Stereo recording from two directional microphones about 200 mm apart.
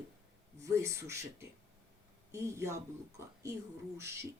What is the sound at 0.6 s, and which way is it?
Speech, 15° right (ahead or behind).